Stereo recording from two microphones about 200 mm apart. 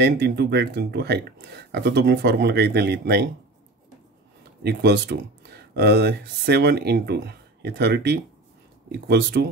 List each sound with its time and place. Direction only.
0.0 s speech: 55° right (ahead or behind)
4.6 s speech: 60° right (ahead or behind)